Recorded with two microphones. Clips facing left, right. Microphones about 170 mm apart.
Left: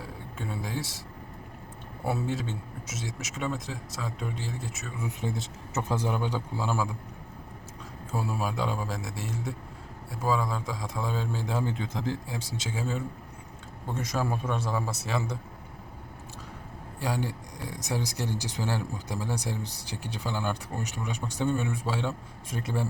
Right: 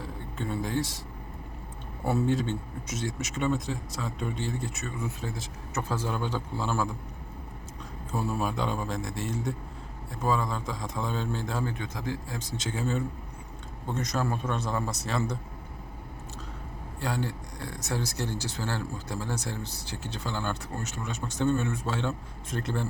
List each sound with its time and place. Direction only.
0.0 s a sound: 5° left (ahead or behind)
2.0 s speech: 5° left (ahead or behind)
5.0 s speech: 20° left (ahead or behind)
8.1 s speech: 10° left (ahead or behind)
11.7 s speech: 25° left (ahead or behind)
12.3 s speech: 10° left (ahead or behind)
17.0 s speech: 10° left (ahead or behind)